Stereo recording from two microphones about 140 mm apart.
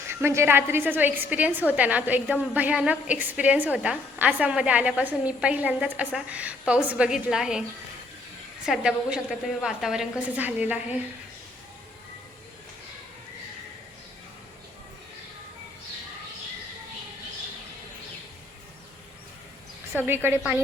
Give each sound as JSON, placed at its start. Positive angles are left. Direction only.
{"t": 0.1, "sound": "a woman's voice", "side_deg": -15}
{"t": 8.6, "sound": "a woman's voice", "side_deg": -5}
{"t": 20.0, "sound": "a woman's voice", "side_deg": -15}